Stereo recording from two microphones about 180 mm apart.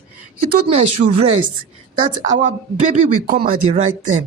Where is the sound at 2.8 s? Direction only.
50° right (ahead or behind).